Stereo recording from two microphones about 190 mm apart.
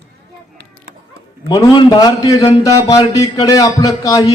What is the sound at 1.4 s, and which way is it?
A man's voice, 20° left (ahead or behind).